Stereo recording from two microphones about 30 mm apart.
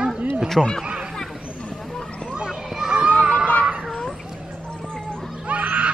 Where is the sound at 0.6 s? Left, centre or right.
Centre.